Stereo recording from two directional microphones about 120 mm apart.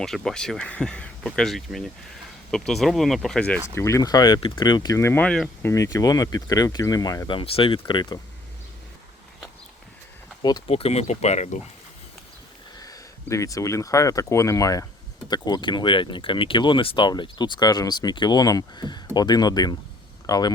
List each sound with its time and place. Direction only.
0.0 s speech: 5° left (ahead or behind)
3.8 s speech: 25° left (ahead or behind)
5.2 s speech: 10° left (ahead or behind)
5.6 s speech: 25° left (ahead or behind)
7.3 s speech: 50° left (ahead or behind)
10.7 s speech: 55° left (ahead or behind)
12.8 s speech: 30° left (ahead or behind)